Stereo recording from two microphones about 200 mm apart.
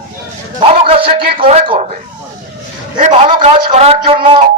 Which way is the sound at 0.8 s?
30° right (ahead or behind).